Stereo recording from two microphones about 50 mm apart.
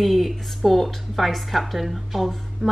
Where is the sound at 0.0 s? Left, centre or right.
Centre.